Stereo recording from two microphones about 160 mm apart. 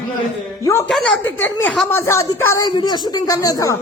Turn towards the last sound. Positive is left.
turn(degrees=20)  # may be behind; listen again after turning